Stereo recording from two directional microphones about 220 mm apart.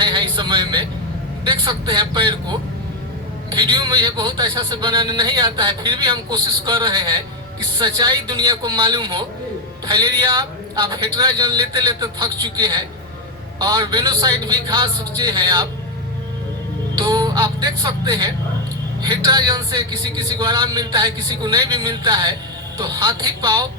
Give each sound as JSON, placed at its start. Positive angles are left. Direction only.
{"t": 0.0, "sound": "vehicle", "side_deg": -20}
{"t": 1.5, "sound": "a man's voice", "side_deg": -20}
{"t": 17.0, "sound": "a man's voice", "side_deg": -20}